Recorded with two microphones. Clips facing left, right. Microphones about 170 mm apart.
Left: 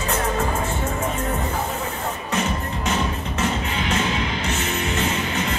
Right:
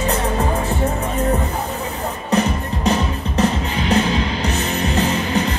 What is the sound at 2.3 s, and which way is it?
Music, 35° right (ahead or behind).